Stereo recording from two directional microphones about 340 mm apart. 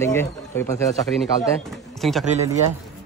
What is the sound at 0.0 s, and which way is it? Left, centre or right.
Speech, centre.